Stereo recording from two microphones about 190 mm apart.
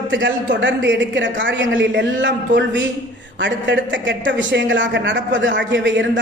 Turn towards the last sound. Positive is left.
turn(degrees=-70)  # may be behind; listen again after turning